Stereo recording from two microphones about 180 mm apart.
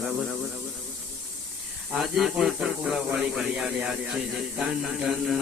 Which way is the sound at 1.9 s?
Centre (ahead or behind).